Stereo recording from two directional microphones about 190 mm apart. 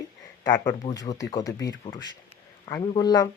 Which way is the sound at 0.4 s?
20° left (ahead or behind).